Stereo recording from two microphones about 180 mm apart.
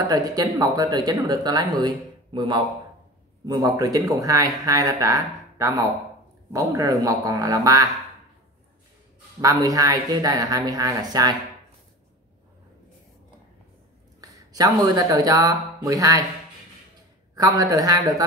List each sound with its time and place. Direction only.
0.1 s speech: 20° right (ahead or behind)
9.4 s speech: 20° right (ahead or behind)
14.2 s speech: 20° right (ahead or behind)
17.4 s speech: 20° right (ahead or behind)